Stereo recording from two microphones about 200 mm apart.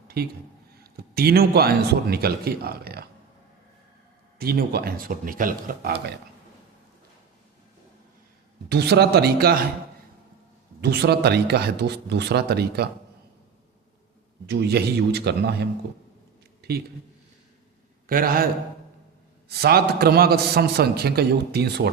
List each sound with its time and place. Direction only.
0.2 s a man's voice: 50° right (ahead or behind)
4.4 s a man's voice: 50° right (ahead or behind)
8.7 s a man's voice: 55° right (ahead or behind)
10.8 s speech: 55° right (ahead or behind)
14.4 s speech: 55° right (ahead or behind)
16.6 s a sound: 50° right (ahead or behind)
18.0 s a man's voice: 45° right (ahead or behind)
19.5 s a man's voice: 50° right (ahead or behind)